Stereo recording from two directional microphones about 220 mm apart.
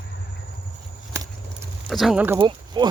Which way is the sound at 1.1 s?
10° right (ahead or behind).